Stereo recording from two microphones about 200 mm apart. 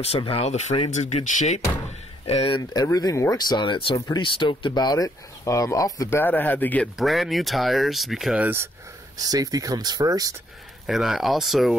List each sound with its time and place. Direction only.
0.0 s speech: 30° left (ahead or behind); by 10.3 s 20° right (ahead or behind)
10.9 s speech: centre (ahead or behind)